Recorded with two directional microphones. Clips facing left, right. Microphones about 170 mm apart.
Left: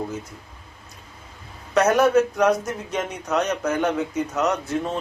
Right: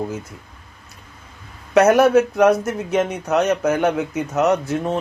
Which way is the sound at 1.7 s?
5° right (ahead or behind).